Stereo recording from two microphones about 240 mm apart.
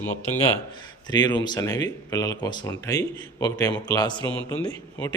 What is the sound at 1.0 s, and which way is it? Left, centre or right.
Speech, centre.